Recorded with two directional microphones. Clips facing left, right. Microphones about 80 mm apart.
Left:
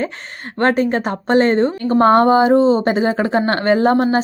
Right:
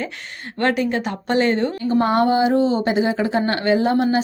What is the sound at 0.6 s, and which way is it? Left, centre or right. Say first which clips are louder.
A woman's voice: left 4 dB; left.